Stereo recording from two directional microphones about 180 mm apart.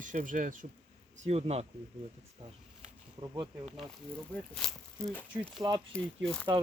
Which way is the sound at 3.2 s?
25° right (ahead or behind).